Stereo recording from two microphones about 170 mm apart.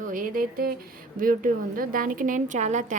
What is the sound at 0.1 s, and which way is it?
A woman's voice, 60° right (ahead or behind).